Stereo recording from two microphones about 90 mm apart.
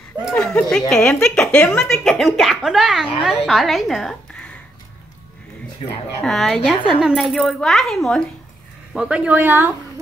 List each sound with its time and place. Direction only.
0.3 s a woman's voice: 10° left (ahead or behind)
6.2 s a woman's voice: centre (ahead or behind)
8.9 s speech: 10° right (ahead or behind)